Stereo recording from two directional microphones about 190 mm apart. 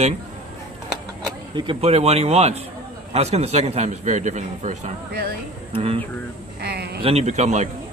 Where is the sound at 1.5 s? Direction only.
25° right (ahead or behind).